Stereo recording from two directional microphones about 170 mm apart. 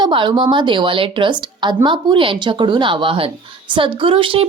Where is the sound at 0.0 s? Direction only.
30° right (ahead or behind).